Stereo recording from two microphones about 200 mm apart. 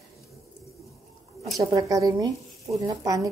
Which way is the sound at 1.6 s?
15° right (ahead or behind).